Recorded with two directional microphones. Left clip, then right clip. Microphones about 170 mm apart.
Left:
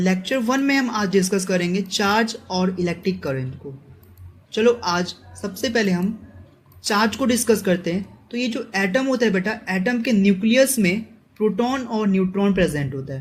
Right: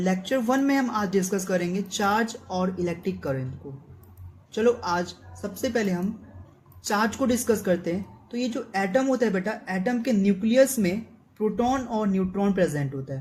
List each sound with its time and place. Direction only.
0.0 s a woman's voice: 25° left (ahead or behind)
4.5 s a woman's voice: 25° left (ahead or behind)